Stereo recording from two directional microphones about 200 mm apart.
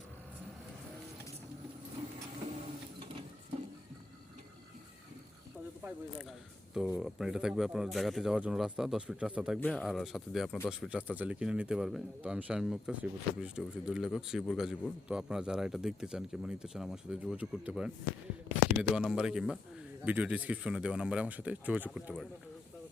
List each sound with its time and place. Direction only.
6.7 s speech: 5° right (ahead or behind)
9.6 s speech: 5° left (ahead or behind)